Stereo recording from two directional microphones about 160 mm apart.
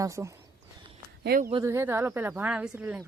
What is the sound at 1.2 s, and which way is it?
Speech, 70° right (ahead or behind).